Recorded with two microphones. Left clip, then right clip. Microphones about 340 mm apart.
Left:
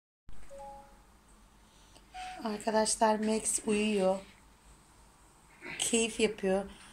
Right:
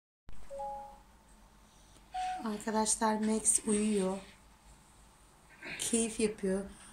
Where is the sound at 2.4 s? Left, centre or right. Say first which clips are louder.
Left 4 dB; centre.